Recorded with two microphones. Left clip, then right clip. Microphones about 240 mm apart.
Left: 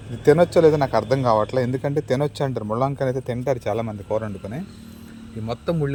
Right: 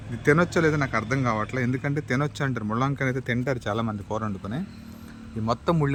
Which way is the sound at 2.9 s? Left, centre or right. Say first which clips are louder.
Left 4 dB; centre.